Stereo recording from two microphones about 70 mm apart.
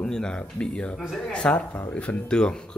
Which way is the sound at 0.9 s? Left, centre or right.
Centre.